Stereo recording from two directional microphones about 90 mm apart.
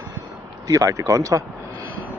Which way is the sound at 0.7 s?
40° right (ahead or behind).